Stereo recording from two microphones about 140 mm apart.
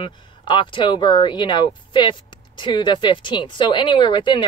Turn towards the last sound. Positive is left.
turn(degrees=35)  # may be behind; listen again after turning